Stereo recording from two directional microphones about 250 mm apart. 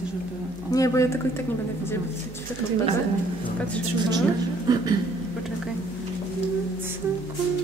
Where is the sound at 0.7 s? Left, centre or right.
Centre.